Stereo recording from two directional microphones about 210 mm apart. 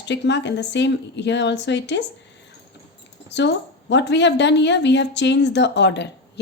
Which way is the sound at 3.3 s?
55° left (ahead or behind).